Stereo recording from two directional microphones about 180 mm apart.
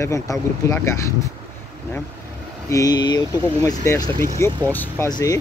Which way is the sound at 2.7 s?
20° left (ahead or behind).